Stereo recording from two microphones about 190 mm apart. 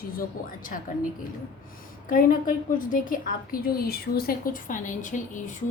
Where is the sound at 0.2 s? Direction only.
45° left (ahead or behind).